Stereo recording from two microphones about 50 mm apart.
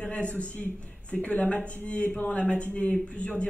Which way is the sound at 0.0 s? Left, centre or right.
Left.